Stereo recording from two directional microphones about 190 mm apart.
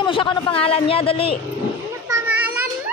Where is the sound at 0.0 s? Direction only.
25° left (ahead or behind).